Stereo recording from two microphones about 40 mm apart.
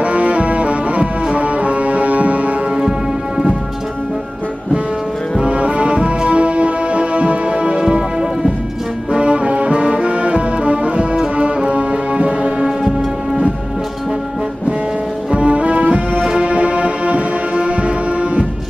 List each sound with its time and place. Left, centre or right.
0.0 s music: right
5.4 s music: right
9.1 s brass instrument: right
11.3 s music: right
15.3 s music: right